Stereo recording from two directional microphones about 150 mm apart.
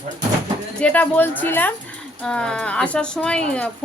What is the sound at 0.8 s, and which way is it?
Speech, 10° left (ahead or behind).